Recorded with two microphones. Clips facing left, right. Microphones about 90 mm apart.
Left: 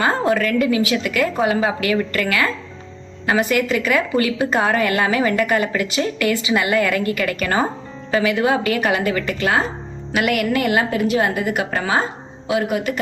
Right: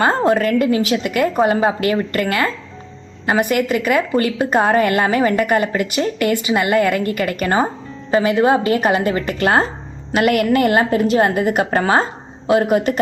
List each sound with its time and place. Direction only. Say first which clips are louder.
0.2 s a woman's voice: right 3 dB; 40° right (ahead or behind)